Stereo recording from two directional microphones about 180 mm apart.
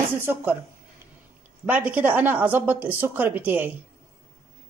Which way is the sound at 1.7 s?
10° right (ahead or behind).